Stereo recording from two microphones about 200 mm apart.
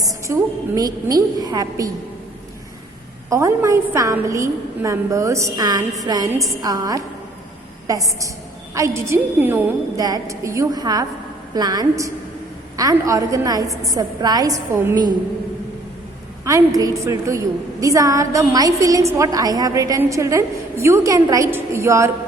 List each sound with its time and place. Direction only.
0.1 s a woman's voice: 15° right (ahead or behind)
3.2 s a woman's voice: 15° right (ahead or behind)
16.4 s a woman's voice: 15° right (ahead or behind)